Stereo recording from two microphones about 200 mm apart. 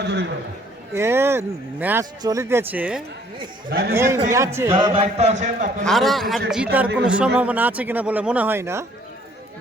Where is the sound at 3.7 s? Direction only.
50° right (ahead or behind).